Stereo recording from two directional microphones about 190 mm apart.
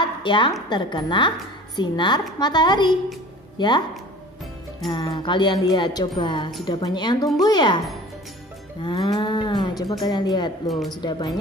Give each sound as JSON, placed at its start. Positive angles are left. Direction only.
{"t": 0.0, "sound": "speech", "side_deg": 25}
{"t": 4.9, "sound": "speech", "side_deg": 25}
{"t": 8.8, "sound": "speech", "side_deg": 25}
{"t": 10.7, "sound": "a woman's voice", "side_deg": 0}
{"t": 11.0, "sound": "speech", "side_deg": 25}